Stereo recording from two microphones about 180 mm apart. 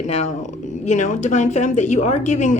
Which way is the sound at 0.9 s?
45° left (ahead or behind).